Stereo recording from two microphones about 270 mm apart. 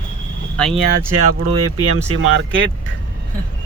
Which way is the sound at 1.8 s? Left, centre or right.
Right.